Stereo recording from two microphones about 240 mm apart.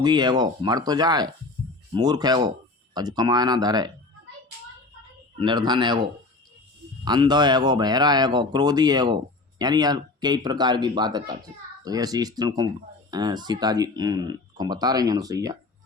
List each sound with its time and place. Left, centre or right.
0.0 s speech: centre
5.4 s speech: centre